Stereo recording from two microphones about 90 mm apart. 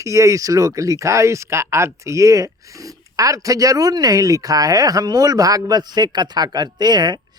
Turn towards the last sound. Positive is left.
turn(degrees=-50)  # may be behind; listen again after turning